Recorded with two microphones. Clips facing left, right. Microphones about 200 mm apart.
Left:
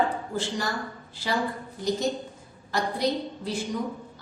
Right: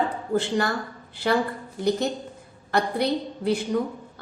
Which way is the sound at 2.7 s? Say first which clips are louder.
Right 3 dB; 60° right (ahead or behind).